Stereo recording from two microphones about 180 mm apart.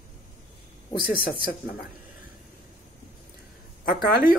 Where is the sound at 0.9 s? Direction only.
55° left (ahead or behind).